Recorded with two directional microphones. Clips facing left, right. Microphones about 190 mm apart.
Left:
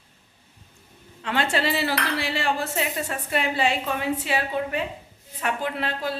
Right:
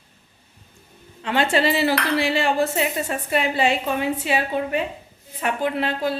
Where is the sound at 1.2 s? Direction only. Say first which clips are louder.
Right 4 dB; 15° right (ahead or behind).